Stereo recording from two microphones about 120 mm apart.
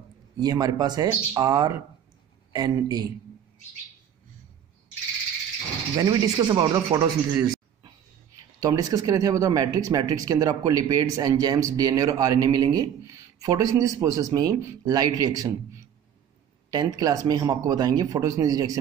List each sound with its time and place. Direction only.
0.4 s speech: 35° right (ahead or behind)
5.9 s speech: 35° right (ahead or behind)
16.7 s speech: 35° right (ahead or behind)